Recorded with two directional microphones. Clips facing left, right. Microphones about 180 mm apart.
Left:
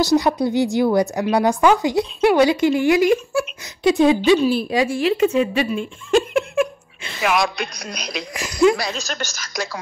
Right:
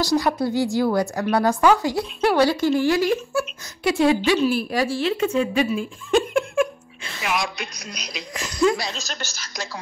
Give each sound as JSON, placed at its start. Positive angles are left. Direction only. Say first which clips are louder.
{"t": 0.0, "sound": "speech", "louder": "left 4 dB", "side_deg": 20}
{"t": 4.9, "sound": "speech", "louder": "left 5 dB", "side_deg": 10}
{"t": 7.2, "sound": "speech", "louder": "left 6 dB", "side_deg": 70}
{"t": 8.4, "sound": "speech", "louder": "left 4 dB", "side_deg": 10}
{"t": 8.8, "sound": "a woman's voice", "louder": "left 5 dB", "side_deg": 65}